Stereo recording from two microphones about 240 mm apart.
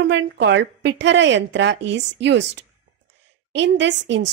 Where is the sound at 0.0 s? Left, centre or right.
Right.